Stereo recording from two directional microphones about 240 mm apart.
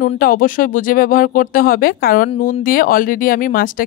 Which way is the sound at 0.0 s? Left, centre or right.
Left.